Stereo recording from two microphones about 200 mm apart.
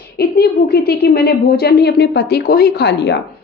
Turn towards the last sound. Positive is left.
turn(degrees=60)  # may be behind; listen again after turning